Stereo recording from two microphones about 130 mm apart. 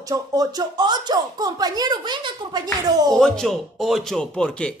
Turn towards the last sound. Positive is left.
turn(degrees=5)  # may be behind; listen again after turning